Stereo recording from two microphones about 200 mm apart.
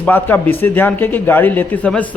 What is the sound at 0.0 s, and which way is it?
Speech, 10° left (ahead or behind).